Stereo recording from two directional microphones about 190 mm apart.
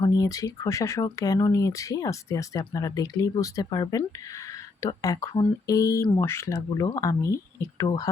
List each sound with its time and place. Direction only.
0.0 s speech: 20° left (ahead or behind)